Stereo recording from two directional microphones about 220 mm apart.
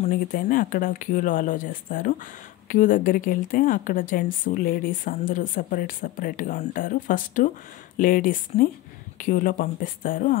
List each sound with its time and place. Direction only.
0.0 s a woman's voice: 40° left (ahead or behind)